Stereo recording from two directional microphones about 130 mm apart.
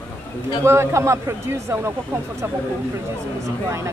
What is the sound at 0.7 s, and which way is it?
A man's voice, 20° right (ahead or behind).